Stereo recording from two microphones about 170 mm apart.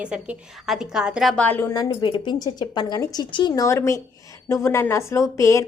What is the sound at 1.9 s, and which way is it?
A woman's voice, 30° left (ahead or behind).